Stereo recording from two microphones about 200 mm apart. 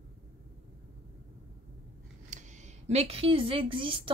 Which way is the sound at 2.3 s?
35° right (ahead or behind).